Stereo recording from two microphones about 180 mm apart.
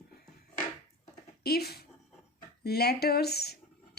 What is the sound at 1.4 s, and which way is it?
Speech, 60° left (ahead or behind).